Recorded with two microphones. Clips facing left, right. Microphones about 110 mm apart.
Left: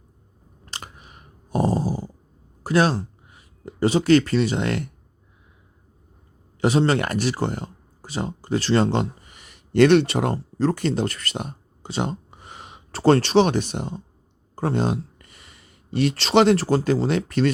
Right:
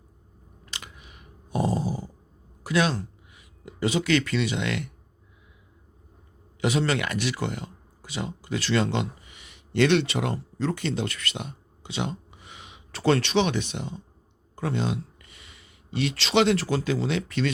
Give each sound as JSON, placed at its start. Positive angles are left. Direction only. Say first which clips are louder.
{"t": 0.6, "sound": "a sound", "louder": "left 4 dB", "side_deg": 40}
{"t": 2.6, "sound": "speech", "louder": "left 5 dB", "side_deg": 35}
{"t": 6.6, "sound": "speech", "louder": "left 5 dB", "side_deg": 35}